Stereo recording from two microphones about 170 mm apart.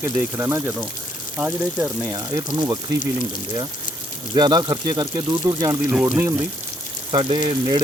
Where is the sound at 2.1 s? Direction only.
25° right (ahead or behind).